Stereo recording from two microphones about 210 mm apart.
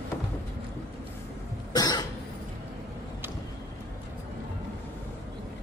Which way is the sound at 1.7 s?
20° left (ahead or behind).